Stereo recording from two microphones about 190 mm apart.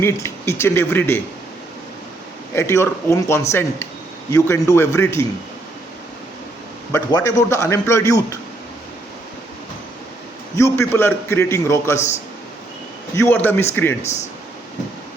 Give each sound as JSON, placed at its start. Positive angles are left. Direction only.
{"t": 0.0, "sound": "a man's voice", "side_deg": 15}
{"t": 2.6, "sound": "a man's voice", "side_deg": 15}
{"t": 6.9, "sound": "a man's voice", "side_deg": 20}
{"t": 10.6, "sound": "a man's voice", "side_deg": 15}
{"t": 11.9, "sound": "a man's voice", "side_deg": 35}
{"t": 13.1, "sound": "a man's voice", "side_deg": 10}
{"t": 14.0, "sound": "a man's voice", "side_deg": 35}